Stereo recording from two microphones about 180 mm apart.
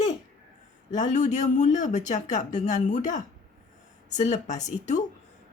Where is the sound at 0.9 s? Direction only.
40° left (ahead or behind).